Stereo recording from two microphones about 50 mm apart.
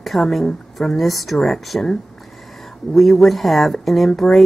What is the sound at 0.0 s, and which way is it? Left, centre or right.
Speech, centre.